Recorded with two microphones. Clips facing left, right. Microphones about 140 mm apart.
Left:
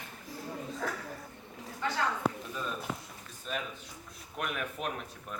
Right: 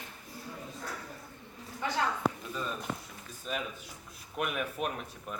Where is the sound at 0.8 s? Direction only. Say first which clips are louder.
Left 6 dB; 90° left.